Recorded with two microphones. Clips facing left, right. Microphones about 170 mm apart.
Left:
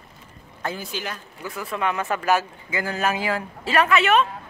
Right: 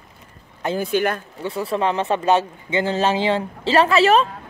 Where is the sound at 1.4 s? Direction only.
30° right (ahead or behind).